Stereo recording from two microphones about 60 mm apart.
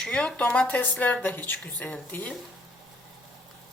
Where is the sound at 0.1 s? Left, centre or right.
Centre.